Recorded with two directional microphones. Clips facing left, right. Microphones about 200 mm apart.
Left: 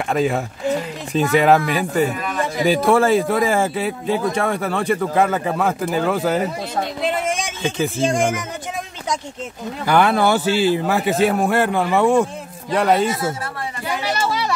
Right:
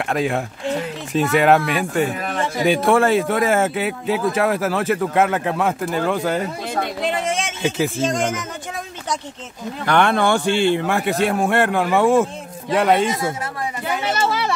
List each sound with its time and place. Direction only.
0.1 s speech: centre (ahead or behind)
7.6 s speech: 5° right (ahead or behind)
8.1 s speech: 10° left (ahead or behind)
9.8 s speech: 5° left (ahead or behind)
14.0 s a sound: 25° right (ahead or behind)